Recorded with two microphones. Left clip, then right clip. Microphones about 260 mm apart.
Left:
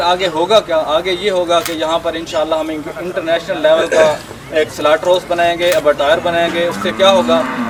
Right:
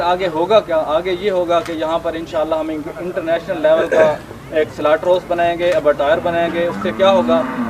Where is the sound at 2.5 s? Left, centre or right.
Centre.